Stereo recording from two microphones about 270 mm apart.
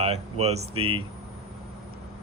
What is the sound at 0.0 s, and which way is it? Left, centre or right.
Speech, right.